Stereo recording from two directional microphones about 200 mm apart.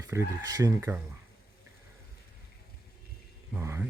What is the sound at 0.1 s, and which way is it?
Speech, 15° right (ahead or behind).